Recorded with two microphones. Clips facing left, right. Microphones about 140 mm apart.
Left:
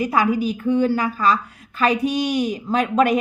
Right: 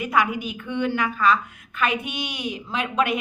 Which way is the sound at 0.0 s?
35° left (ahead or behind).